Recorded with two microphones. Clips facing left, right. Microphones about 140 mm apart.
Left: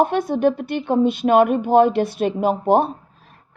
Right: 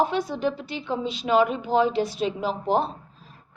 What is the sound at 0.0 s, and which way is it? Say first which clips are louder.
A woman's voice: left 6 dB; 55° left (ahead or behind).